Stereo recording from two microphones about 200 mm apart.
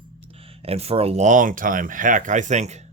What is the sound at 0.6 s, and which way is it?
Speech, 30° right (ahead or behind).